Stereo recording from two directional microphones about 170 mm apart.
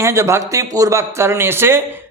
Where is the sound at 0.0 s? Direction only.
15° right (ahead or behind).